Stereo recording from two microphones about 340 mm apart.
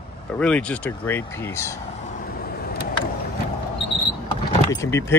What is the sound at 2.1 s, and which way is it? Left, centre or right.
Vehicle, left.